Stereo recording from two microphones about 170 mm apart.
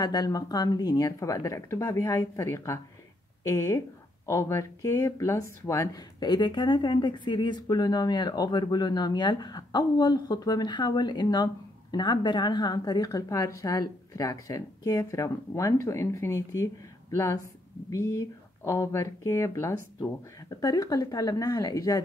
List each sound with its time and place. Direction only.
0.0 s speech: 25° left (ahead or behind)
17.8 s speech: 15° left (ahead or behind)